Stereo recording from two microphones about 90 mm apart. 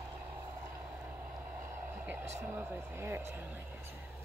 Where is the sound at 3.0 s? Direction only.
25° right (ahead or behind).